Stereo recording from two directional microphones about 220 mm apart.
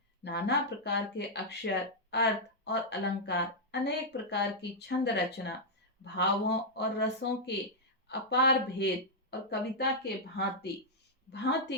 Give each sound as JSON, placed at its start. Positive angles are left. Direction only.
{"t": 0.3, "sound": "speech", "side_deg": 50}